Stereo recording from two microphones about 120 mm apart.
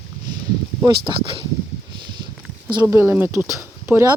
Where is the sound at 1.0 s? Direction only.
45° right (ahead or behind).